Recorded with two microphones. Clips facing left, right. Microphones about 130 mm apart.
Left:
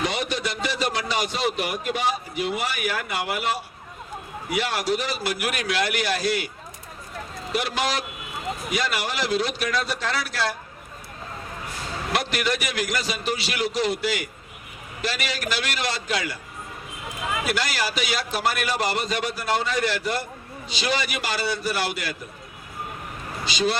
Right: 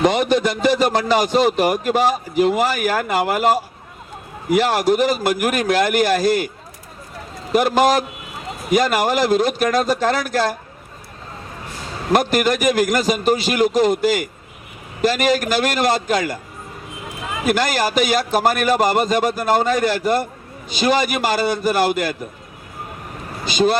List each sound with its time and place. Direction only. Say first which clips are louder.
0.0 s a man's voice: right 10 dB; 50° right (ahead or behind)
7.5 s a man's voice: right 11 dB; 45° right (ahead or behind)
12.1 s a man's voice: right 9 dB; 45° right (ahead or behind)
17.4 s a man's voice: right 11 dB; 50° right (ahead or behind)
23.5 s a man's voice: right 7 dB; 50° right (ahead or behind)